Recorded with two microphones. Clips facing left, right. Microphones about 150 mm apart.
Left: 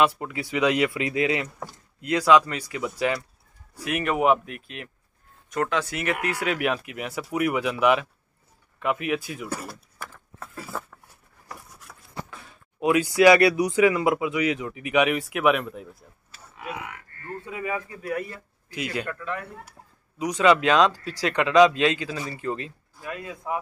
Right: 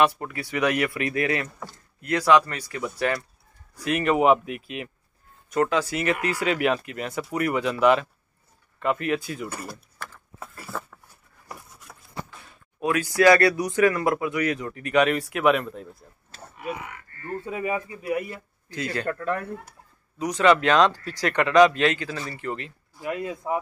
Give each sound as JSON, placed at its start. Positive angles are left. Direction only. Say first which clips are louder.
{"t": 0.0, "sound": "speech", "louder": "even", "side_deg": 15}
{"t": 12.8, "sound": "speech", "louder": "left 2 dB", "side_deg": 15}
{"t": 16.5, "sound": "a sound", "louder": "right 2 dB", "side_deg": 90}
{"t": 17.5, "sound": "speech", "louder": "right 2 dB", "side_deg": -25}
{"t": 18.7, "sound": "speech", "louder": "right 1 dB", "side_deg": 10}
{"t": 19.1, "sound": "speech", "louder": "right 5 dB", "side_deg": -50}
{"t": 20.2, "sound": "speech", "louder": "even", "side_deg": 15}
{"t": 22.9, "sound": "speech", "louder": "right 6 dB", "side_deg": -20}